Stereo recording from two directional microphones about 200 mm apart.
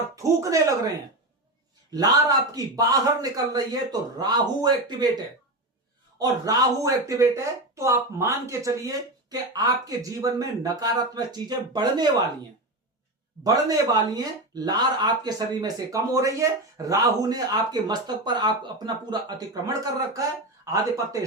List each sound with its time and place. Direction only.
0.2 s speech: 15° right (ahead or behind)
6.1 s speech: 15° right (ahead or behind)
13.4 s speech: 20° right (ahead or behind)